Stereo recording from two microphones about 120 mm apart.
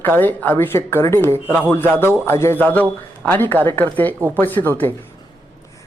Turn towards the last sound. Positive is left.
turn(degrees=15)  # may be behind; listen again after turning